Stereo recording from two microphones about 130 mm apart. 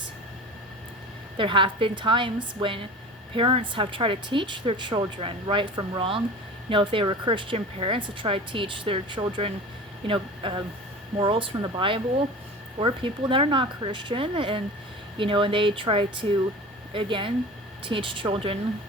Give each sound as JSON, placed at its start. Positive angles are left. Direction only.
{"t": 1.4, "sound": "speech", "side_deg": -40}